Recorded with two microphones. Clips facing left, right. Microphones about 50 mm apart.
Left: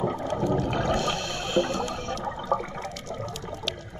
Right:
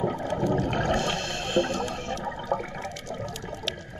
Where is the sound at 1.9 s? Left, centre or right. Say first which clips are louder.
Even; right.